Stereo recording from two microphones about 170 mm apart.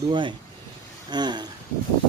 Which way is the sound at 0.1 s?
30° right (ahead or behind).